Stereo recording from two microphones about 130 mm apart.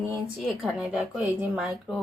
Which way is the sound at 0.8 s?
5° right (ahead or behind).